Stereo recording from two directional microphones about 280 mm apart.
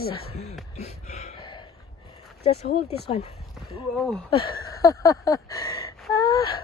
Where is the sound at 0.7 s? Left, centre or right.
Left.